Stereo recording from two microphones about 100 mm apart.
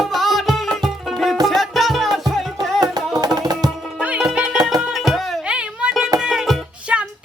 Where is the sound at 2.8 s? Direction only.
40° right (ahead or behind).